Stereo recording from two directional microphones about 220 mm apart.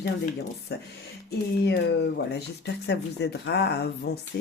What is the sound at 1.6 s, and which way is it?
Speech, 50° left (ahead or behind).